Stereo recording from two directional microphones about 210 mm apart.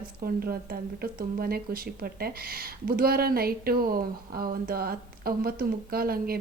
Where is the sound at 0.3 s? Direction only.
45° right (ahead or behind).